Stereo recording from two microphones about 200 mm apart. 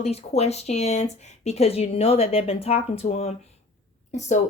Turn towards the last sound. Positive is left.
turn(degrees=35)  # may be behind; listen again after turning